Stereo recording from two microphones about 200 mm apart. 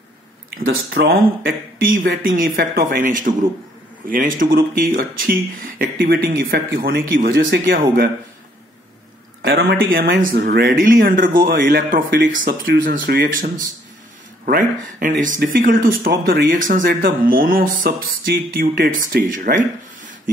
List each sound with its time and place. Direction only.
0.6 s speech: 45° right (ahead or behind)
9.4 s speech: 55° right (ahead or behind)